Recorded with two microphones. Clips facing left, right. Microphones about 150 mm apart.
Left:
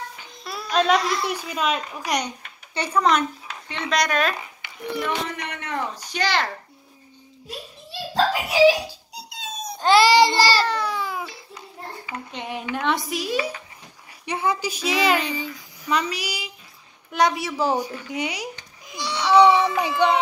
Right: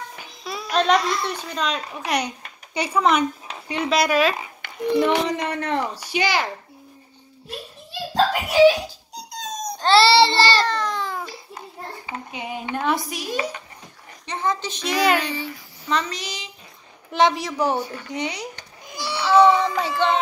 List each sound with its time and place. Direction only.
0.4 s a woman's voice: centre (ahead or behind)
2.1 s a child's voice: 10° right (ahead or behind)
4.9 s speech: 25° right (ahead or behind)
5.9 s a child's voice: 10° right (ahead or behind)
8.1 s music: 5° left (ahead or behind)
9.8 s a child's voice: 10° left (ahead or behind)
12.3 s a woman's voice: 5° right (ahead or behind)
15.3 s a woman's voice: 10° left (ahead or behind)
18.9 s baby cry: 5° right (ahead or behind)